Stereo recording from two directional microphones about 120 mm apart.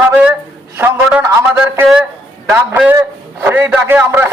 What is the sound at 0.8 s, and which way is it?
A man's voice, 15° right (ahead or behind).